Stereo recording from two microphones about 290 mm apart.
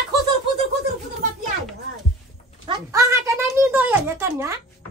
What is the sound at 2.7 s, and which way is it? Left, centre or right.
A child's voice, centre.